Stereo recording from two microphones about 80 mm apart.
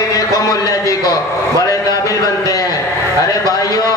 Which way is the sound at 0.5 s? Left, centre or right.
Left.